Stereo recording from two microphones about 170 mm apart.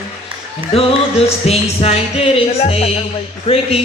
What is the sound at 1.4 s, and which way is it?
Music, 35° left (ahead or behind).